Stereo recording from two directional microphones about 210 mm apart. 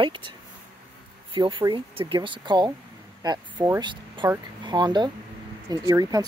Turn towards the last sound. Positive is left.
turn(degrees=-15)  # may be behind; listen again after turning